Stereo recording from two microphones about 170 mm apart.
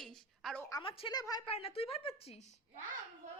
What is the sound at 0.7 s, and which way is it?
Speech, 30° left (ahead or behind).